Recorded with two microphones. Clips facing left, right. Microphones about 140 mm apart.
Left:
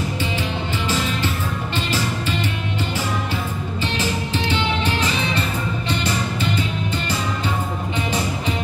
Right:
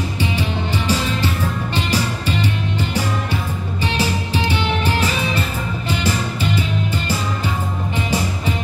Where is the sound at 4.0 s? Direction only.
10° right (ahead or behind).